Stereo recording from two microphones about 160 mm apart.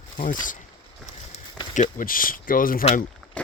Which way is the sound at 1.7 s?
55° left (ahead or behind).